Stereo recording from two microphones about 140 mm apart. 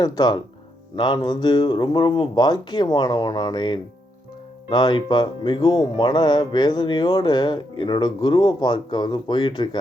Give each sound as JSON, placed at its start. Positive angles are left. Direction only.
{"t": 0.0, "sound": "speech", "side_deg": 30}